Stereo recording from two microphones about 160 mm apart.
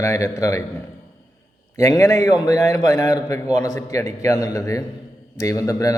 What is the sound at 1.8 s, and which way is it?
A man's voice, 20° left (ahead or behind).